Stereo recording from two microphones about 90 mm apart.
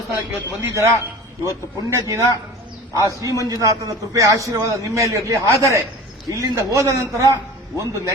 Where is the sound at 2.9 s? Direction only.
35° right (ahead or behind).